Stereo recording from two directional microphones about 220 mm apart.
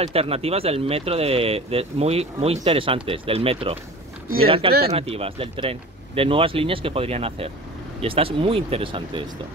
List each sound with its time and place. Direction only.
0.1 s speech: 25° right (ahead or behind)